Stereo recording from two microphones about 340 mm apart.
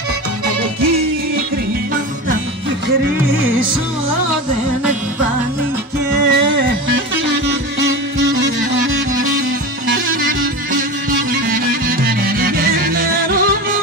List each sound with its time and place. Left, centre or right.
6.1 s music: right
10.7 s music: right